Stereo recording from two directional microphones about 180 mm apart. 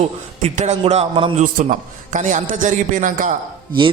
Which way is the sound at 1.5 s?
45° right (ahead or behind).